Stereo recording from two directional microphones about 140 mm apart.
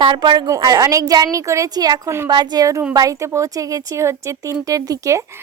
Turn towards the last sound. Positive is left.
turn(degrees=-20)  # may be behind; listen again after turning